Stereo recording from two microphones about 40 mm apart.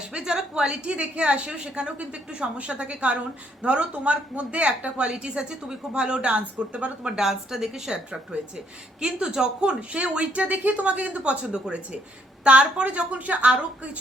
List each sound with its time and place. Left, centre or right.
0.1 s a woman's voice: centre
7.2 s a woman's voice: centre; by 14.0 s right